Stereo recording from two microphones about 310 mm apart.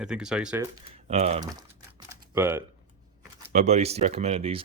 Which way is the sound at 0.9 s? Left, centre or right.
Centre.